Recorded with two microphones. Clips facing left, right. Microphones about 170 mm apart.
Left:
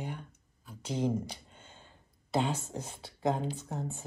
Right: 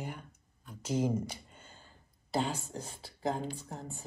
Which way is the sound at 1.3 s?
Centre (ahead or behind).